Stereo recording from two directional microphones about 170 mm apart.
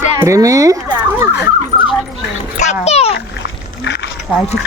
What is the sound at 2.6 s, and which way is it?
Speech, 40° left (ahead or behind).